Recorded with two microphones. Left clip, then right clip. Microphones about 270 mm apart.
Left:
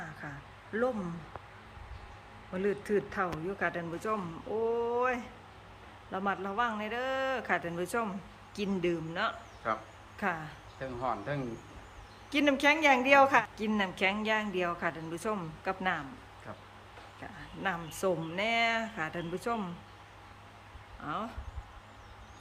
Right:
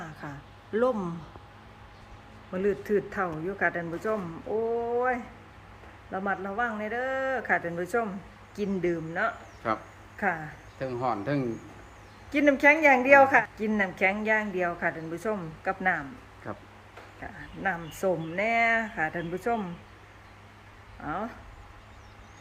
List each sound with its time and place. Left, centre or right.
0.0 s a sound: centre
2.5 s a woman's voice: centre
9.6 s speech: right
10.2 s speech: centre
10.8 s speech: right
12.3 s a woman's voice: centre
17.6 s a woman's voice: centre
21.0 s speech: centre